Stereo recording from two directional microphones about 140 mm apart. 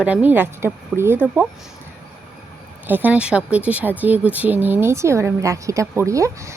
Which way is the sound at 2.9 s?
10° right (ahead or behind).